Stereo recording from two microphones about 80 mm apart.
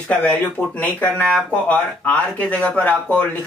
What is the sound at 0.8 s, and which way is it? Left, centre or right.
Speech, left.